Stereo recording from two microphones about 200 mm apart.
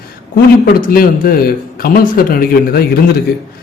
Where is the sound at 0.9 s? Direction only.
45° left (ahead or behind).